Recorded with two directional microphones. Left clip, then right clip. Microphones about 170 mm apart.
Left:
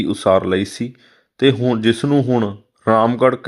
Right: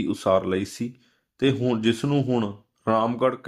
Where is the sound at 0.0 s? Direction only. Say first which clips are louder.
Left 7 dB; 20° left (ahead or behind).